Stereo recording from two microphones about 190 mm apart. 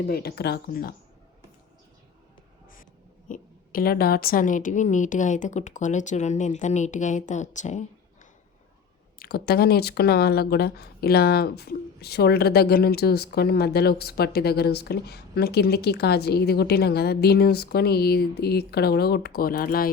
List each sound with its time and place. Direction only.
0.1 s speech: 55° left (ahead or behind)
3.2 s a woman's voice: 45° left (ahead or behind)
9.1 s speech: 55° left (ahead or behind)